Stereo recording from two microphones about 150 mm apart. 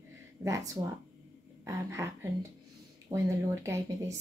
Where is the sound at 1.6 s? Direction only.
20° right (ahead or behind).